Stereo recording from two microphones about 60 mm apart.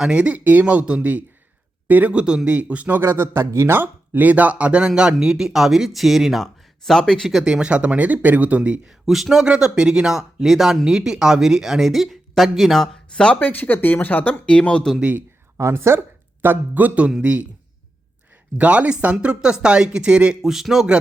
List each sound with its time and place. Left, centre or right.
0.0 s speech: centre
2.1 s speech: centre
3.0 s speech: right
3.8 s speech: right; by 7.3 s centre
7.4 s speech: centre
8.9 s speech: centre
13.4 s speech: left; by 14.9 s centre
15.5 s speech: right; by 17.4 s centre
18.5 s speech: right
20.5 s speech: centre